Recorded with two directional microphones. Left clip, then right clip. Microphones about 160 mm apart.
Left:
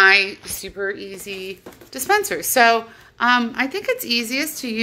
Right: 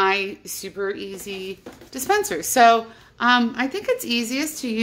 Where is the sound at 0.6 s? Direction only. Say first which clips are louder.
Left 1 dB; 5° right (ahead or behind).